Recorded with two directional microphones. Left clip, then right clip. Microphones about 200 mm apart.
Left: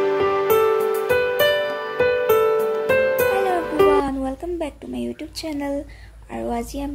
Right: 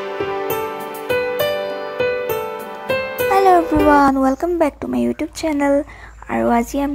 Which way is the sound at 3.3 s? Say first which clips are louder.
Right 7 dB; 30° right (ahead or behind).